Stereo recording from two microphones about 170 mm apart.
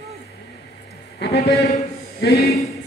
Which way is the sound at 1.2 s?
75° left (ahead or behind).